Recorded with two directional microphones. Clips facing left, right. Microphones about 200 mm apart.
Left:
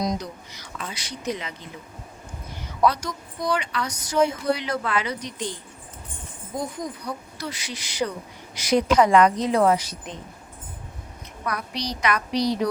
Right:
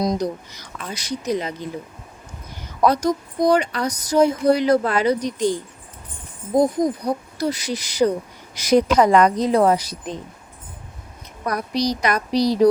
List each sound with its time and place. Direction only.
0.0 s speech: 30° right (ahead or behind)
0.9 s speech: 40° right (ahead or behind)
2.8 s speech: 40° right (ahead or behind)
11.4 s speech: 40° right (ahead or behind)